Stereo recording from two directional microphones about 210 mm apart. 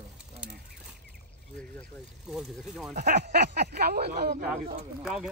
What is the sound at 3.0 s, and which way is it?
Speech, 50° right (ahead or behind).